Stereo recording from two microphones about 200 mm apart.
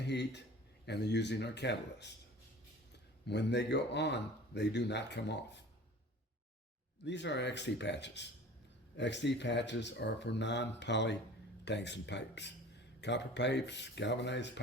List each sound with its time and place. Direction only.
0.0 s a man's voice: 60° left (ahead or behind)
3.2 s speech: 60° left (ahead or behind)
7.0 s speech: 60° left (ahead or behind)